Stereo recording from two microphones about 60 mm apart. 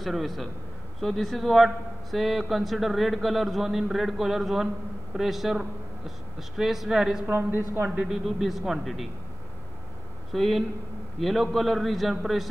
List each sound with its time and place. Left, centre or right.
0.0 s a man's voice: centre
7.2 s a woman's voice: right
8.1 s a man's voice: centre
10.3 s a man's voice: centre